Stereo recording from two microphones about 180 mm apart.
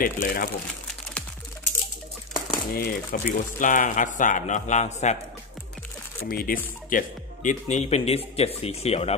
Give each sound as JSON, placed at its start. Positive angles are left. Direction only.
{"t": 0.0, "sound": "speech", "side_deg": 50}
{"t": 2.3, "sound": "speech", "side_deg": 55}
{"t": 6.2, "sound": "speech", "side_deg": 55}